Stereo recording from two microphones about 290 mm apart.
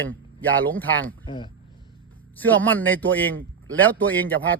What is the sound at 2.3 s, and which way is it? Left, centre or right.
A man's voice, centre.